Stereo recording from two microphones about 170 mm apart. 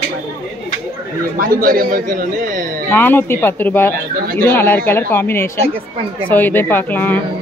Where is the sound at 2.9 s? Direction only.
10° left (ahead or behind).